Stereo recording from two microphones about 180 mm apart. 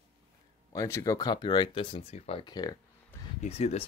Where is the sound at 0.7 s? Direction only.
15° left (ahead or behind).